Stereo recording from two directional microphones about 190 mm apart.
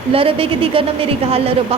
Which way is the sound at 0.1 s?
30° right (ahead or behind).